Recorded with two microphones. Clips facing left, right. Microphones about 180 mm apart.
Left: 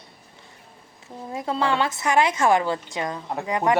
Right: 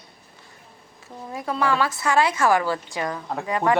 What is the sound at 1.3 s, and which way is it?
A woman's voice, 25° left (ahead or behind).